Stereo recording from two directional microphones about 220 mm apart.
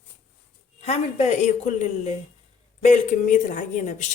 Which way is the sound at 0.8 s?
30° left (ahead or behind).